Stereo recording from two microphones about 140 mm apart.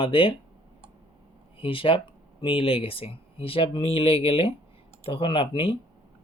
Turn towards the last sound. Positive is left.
turn(degrees=40)  # may be behind; listen again after turning